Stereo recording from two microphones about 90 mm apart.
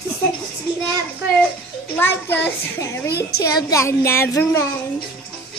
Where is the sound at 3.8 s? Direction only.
30° left (ahead or behind).